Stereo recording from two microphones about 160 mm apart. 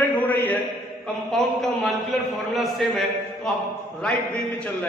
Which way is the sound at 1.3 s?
Centre (ahead or behind).